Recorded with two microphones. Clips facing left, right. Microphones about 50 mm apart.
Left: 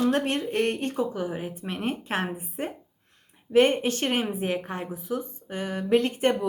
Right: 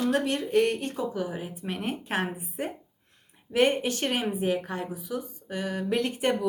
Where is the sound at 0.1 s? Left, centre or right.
Left.